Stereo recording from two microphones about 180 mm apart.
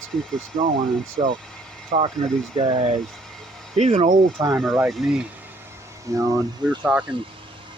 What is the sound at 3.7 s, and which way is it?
Speech, 35° right (ahead or behind).